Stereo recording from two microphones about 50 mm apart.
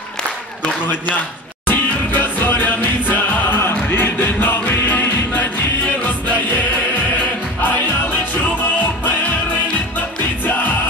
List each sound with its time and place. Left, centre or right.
1.7 s music: left